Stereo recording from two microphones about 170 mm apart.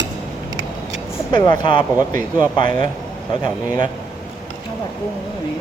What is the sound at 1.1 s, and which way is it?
Speech, 25° left (ahead or behind).